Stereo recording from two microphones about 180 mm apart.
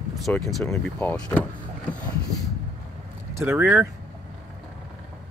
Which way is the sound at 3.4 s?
10° right (ahead or behind).